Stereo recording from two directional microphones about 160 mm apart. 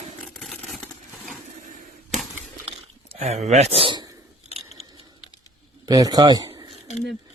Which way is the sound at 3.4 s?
45° right (ahead or behind).